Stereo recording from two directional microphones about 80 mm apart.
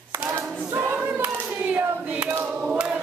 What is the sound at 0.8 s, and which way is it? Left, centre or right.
Hands, right.